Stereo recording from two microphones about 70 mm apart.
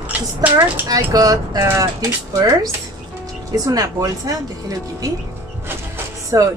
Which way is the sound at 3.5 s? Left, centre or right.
Right.